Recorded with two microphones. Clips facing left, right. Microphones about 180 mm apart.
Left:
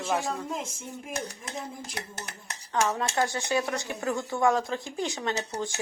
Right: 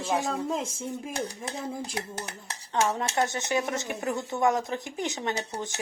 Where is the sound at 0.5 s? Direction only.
30° right (ahead or behind).